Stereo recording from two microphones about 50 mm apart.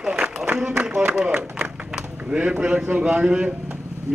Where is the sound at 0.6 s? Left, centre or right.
Centre.